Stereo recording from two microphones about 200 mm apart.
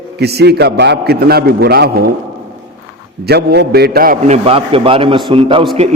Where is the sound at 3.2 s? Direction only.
50° right (ahead or behind).